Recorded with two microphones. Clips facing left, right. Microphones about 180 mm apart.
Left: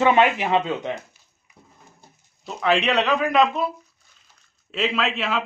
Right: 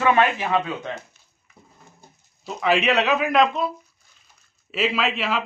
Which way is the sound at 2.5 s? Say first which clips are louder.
Even; 5° right (ahead or behind).